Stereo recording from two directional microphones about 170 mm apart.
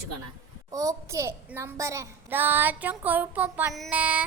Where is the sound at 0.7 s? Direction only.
20° right (ahead or behind).